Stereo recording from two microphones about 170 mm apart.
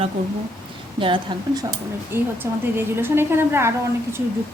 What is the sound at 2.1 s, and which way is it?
A woman's voice, 15° right (ahead or behind).